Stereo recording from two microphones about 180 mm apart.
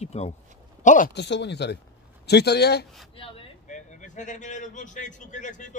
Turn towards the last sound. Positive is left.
turn(degrees=45)  # may be behind; listen again after turning